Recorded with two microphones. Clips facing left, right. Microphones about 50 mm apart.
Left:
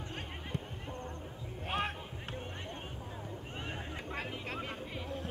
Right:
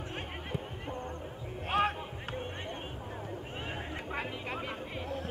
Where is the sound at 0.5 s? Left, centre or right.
Centre.